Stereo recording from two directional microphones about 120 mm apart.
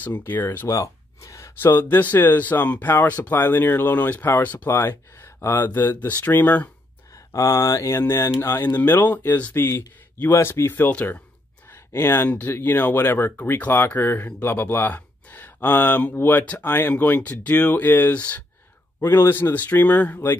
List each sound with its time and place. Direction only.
0.0 s speech: 15° left (ahead or behind)
7.3 s speech: 25° left (ahead or behind)